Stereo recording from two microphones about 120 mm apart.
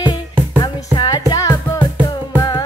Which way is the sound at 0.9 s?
35° left (ahead or behind).